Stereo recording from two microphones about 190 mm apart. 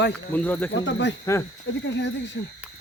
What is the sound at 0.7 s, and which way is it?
Speech, 70° left (ahead or behind).